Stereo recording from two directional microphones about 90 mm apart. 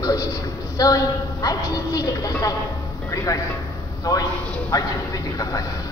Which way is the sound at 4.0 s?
40° left (ahead or behind).